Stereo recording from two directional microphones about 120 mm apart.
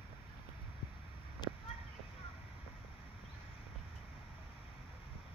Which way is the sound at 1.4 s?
40° left (ahead or behind).